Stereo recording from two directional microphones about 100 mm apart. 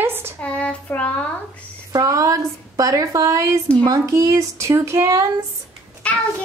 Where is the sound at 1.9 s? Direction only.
35° right (ahead or behind).